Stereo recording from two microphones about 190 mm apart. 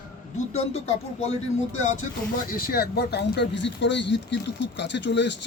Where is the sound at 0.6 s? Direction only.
35° left (ahead or behind).